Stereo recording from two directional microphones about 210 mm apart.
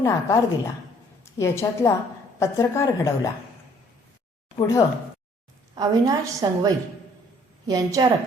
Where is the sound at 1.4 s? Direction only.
15° left (ahead or behind).